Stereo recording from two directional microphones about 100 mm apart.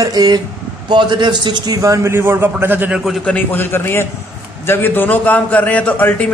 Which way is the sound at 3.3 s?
20° left (ahead or behind).